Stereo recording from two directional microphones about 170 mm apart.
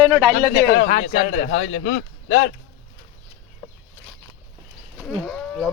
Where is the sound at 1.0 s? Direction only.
90° left.